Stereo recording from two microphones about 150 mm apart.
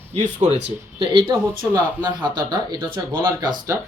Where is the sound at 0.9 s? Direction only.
35° right (ahead or behind).